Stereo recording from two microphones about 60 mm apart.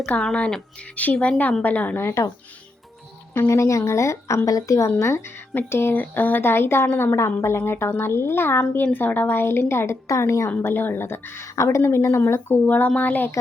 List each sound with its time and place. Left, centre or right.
0.3 s a woman's voice: centre
2.0 s a woman's voice: left
3.5 s speech: left
4.4 s speech: left
4.9 s a woman's voice: left
10.6 s speech: left
11.4 s a woman's voice: left
12.5 s a woman's voice: left